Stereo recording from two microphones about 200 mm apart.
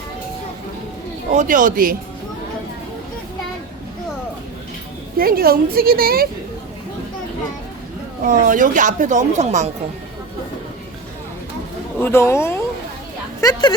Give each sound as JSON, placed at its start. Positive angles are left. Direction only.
{"t": 1.3, "sound": "speech", "side_deg": -40}
{"t": 5.1, "sound": "a woman's voice", "side_deg": -50}
{"t": 8.2, "sound": "speech", "side_deg": -40}
{"t": 11.9, "sound": "speech", "side_deg": 10}